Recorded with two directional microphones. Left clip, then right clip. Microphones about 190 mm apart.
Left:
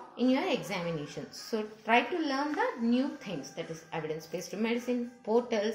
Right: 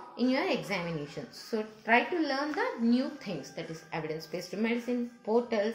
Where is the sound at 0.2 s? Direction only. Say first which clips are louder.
Even; 10° right (ahead or behind).